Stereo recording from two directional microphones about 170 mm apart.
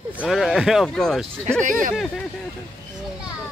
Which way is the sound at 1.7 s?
50° right (ahead or behind).